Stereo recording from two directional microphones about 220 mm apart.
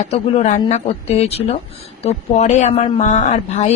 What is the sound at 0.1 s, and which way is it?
Speech, 30° left (ahead or behind).